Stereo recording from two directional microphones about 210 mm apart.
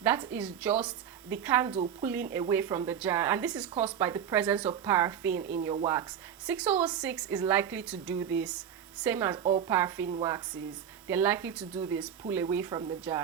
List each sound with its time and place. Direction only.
0.3 s speech: 5° right (ahead or behind)
9.3 s a woman's voice: 30° right (ahead or behind)
9.6 s speech: 10° right (ahead or behind)